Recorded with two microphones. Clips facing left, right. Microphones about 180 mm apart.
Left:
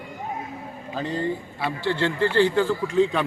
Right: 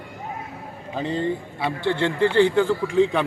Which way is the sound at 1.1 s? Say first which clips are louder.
Right 2 dB; 20° right (ahead or behind).